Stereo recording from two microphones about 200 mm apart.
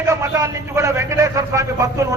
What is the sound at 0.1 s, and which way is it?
A man's voice, 15° right (ahead or behind).